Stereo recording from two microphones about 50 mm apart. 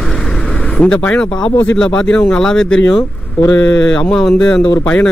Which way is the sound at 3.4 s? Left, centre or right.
Left.